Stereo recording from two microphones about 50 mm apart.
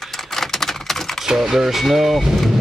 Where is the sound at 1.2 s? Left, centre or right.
Centre.